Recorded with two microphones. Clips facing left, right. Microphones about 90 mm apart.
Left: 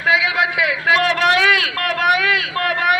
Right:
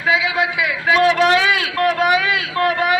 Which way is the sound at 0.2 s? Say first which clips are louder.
Left 1 dB; 60° left (ahead or behind).